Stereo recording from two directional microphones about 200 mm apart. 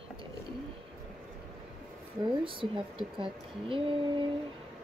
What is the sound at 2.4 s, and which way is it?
Speech, 25° right (ahead or behind).